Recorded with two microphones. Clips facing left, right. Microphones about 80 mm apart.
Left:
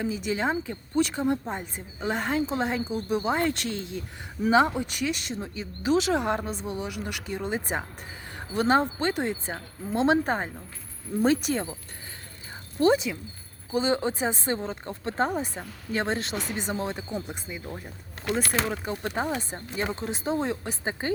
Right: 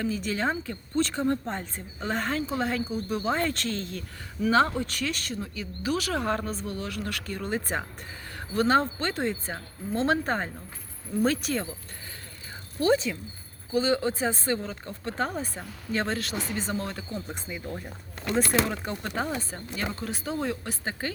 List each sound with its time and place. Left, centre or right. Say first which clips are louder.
0.0 s speech: left 1 dB; centre
12.9 s speech: even; centre
19.0 s speech: left 2 dB; centre